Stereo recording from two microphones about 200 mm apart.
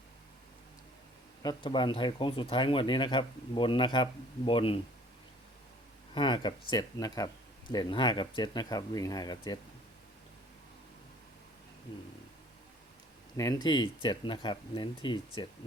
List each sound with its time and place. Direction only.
1.4 s speech: 20° left (ahead or behind)
6.1 s speech: 25° left (ahead or behind)
13.3 s speech: 20° left (ahead or behind)